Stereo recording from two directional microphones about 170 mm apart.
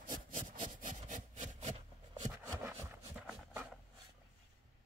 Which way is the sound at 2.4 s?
15° right (ahead or behind).